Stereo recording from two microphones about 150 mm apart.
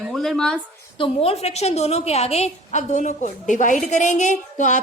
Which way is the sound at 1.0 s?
40° left (ahead or behind).